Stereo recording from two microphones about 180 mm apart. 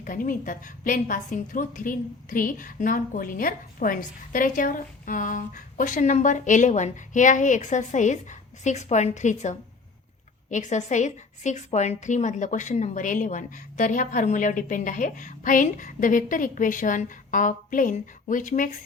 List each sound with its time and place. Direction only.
0.0 s a woman's voice: 50° left (ahead or behind)